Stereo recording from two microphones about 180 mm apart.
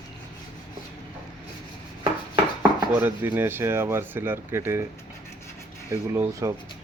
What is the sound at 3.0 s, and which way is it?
Speech, 10° right (ahead or behind).